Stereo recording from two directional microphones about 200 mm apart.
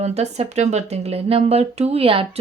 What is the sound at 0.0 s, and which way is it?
Speech, 35° right (ahead or behind).